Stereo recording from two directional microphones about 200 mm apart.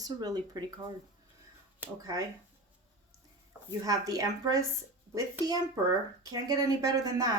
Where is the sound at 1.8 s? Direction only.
15° right (ahead or behind).